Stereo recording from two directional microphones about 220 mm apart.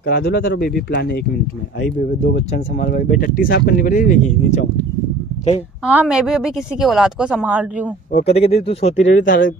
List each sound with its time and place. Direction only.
0.0 s speech: 45° left (ahead or behind)
2.2 s speech: 40° left (ahead or behind)
5.9 s a woman's voice: 5° right (ahead or behind)
8.1 s speech: 30° left (ahead or behind)